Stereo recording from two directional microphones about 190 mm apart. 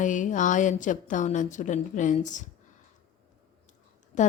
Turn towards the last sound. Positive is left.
turn(degrees=40)  # may be behind; listen again after turning